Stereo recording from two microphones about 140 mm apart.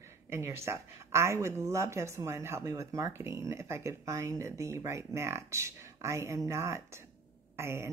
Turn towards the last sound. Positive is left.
turn(degrees=-20)  # may be behind; listen again after turning